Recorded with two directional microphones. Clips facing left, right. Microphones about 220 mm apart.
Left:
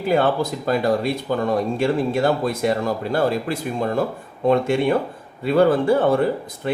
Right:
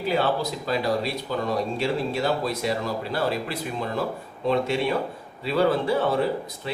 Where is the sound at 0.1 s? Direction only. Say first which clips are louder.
Left 6 dB; 50° left (ahead or behind).